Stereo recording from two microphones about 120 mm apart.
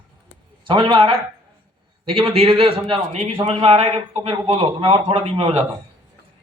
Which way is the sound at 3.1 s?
65° right (ahead or behind).